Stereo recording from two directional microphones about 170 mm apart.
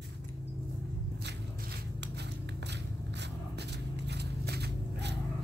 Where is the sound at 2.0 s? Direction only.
90° right.